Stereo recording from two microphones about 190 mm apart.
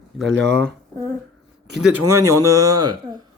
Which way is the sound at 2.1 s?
15° right (ahead or behind).